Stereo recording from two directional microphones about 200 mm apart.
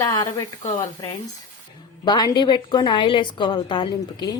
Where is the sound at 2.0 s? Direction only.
20° left (ahead or behind).